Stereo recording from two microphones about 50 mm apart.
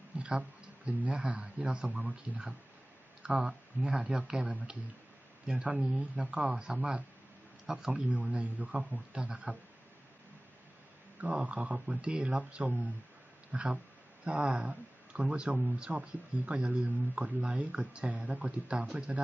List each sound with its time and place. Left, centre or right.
0.2 s a sound: right
1.0 s speech: right
3.2 s speech: centre
4.4 s speech: right
8.1 s speech: right
11.2 s speech: right